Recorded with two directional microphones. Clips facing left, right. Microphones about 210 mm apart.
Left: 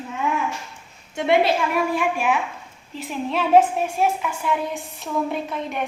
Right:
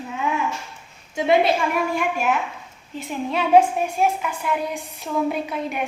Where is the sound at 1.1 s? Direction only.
Centre (ahead or behind).